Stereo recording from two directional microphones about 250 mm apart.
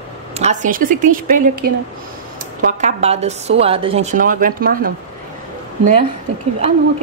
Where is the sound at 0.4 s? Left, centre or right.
Right.